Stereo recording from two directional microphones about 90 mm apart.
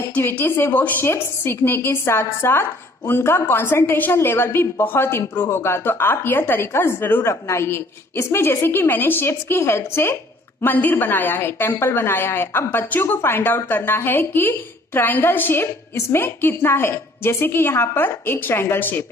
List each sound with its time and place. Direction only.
0.1 s a woman's voice: 20° left (ahead or behind)